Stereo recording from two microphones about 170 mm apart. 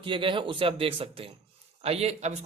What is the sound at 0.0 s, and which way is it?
A man's voice, 30° right (ahead or behind).